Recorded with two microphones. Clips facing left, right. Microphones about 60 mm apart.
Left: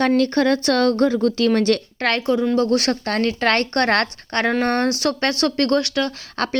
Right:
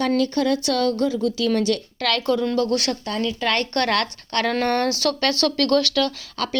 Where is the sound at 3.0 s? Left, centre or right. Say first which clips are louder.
Left 4 dB; left.